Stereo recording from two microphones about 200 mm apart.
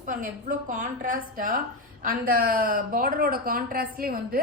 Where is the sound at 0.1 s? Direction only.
40° right (ahead or behind).